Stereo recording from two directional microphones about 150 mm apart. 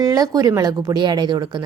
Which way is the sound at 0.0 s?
25° right (ahead or behind).